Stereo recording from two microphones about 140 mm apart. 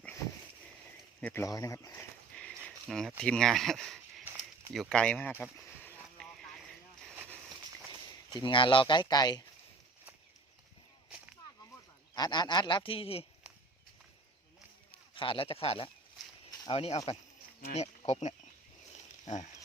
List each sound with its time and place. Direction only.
1.2 s speech: 15° left (ahead or behind)
1.9 s a sound: 10° left (ahead or behind)
3.2 s speech: 5° left (ahead or behind)
8.3 s speech: 35° left (ahead or behind)
12.1 s speech: 30° left (ahead or behind)
15.1 s speech: 40° left (ahead or behind); by 19.5 s 55° left (ahead or behind)